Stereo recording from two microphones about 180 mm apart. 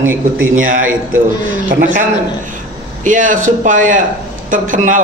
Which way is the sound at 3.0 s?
45° right (ahead or behind).